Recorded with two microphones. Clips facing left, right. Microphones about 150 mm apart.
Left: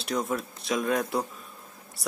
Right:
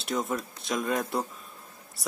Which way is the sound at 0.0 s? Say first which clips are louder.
Left 1 dB; centre (ahead or behind).